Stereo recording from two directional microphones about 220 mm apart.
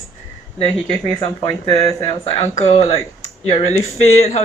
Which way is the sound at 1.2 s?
20° left (ahead or behind).